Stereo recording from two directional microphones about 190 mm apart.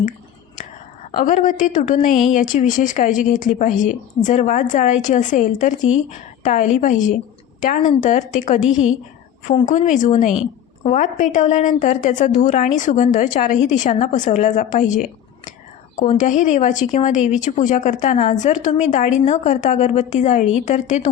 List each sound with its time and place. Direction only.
1.1 s a woman's voice: 40° left (ahead or behind)